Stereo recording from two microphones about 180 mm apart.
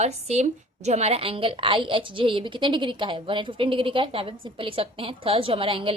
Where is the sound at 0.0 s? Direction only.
35° right (ahead or behind).